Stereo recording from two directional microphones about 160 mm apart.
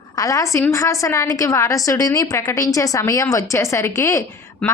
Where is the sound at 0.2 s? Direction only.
20° left (ahead or behind).